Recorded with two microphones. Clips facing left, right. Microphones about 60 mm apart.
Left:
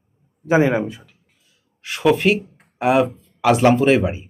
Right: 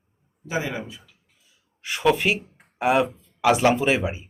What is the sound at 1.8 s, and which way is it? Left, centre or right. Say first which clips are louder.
Speech: left 4 dB; centre.